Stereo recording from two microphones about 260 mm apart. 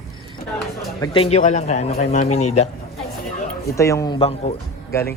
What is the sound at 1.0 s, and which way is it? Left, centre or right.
Speech, left.